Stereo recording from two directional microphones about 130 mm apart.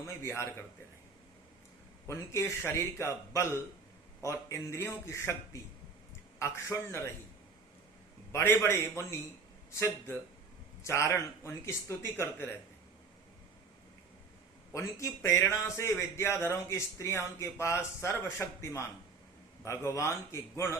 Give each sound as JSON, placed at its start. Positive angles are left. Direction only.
{"t": 0.2, "sound": "a man's voice", "side_deg": 20}
{"t": 2.0, "sound": "a man's voice", "side_deg": 20}
{"t": 6.4, "sound": "a man's voice", "side_deg": 20}
{"t": 8.3, "sound": "a man's voice", "side_deg": 20}
{"t": 14.7, "sound": "a man's voice", "side_deg": 25}